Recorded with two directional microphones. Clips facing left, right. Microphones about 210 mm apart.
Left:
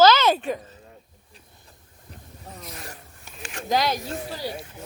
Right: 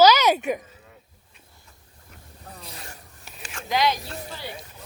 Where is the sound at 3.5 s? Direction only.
45° left (ahead or behind).